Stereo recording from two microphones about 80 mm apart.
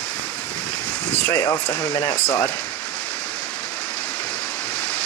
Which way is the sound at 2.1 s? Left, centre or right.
Centre.